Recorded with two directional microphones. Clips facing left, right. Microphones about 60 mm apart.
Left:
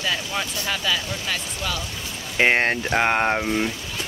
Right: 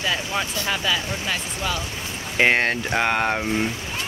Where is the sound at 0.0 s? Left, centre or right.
Centre.